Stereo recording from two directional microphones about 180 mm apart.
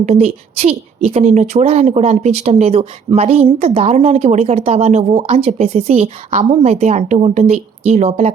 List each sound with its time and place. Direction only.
0.0 s a woman's voice: 35° right (ahead or behind)